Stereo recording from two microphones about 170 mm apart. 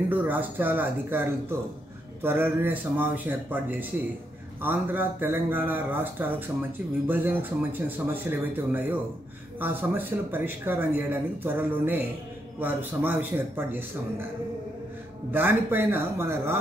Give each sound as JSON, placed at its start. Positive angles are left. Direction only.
{"t": 0.1, "sound": "speech", "side_deg": -10}
{"t": 15.3, "sound": "speech", "side_deg": -10}